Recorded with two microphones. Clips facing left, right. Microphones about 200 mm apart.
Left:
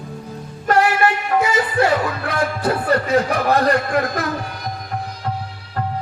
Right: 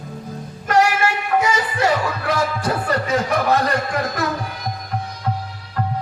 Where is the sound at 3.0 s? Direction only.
60° left (ahead or behind).